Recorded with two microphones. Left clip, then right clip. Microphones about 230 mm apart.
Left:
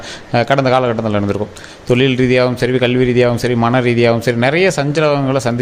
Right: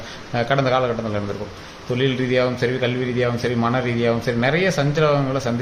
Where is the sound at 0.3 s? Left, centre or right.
Left.